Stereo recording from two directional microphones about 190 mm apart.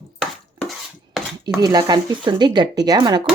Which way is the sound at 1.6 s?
20° right (ahead or behind).